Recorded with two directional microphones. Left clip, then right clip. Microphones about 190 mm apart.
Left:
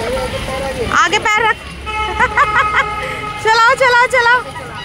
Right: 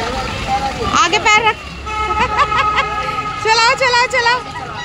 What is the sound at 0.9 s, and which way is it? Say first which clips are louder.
Speech: right 1 dB; 10° left (ahead or behind).